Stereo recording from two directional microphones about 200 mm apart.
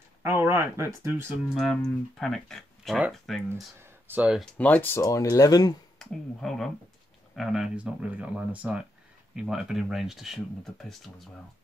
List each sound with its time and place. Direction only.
0.2 s speech: 10° right (ahead or behind)
1.5 s speech: centre (ahead or behind)
4.6 s speech: 5° left (ahead or behind)
5.9 s speech: centre (ahead or behind)